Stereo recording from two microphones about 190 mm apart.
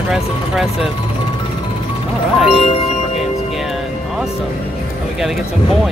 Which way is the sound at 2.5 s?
30° left (ahead or behind).